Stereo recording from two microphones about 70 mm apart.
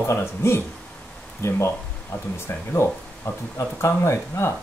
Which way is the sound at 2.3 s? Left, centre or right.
Left.